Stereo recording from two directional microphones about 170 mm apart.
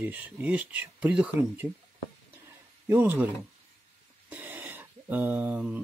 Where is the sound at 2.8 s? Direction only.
10° right (ahead or behind).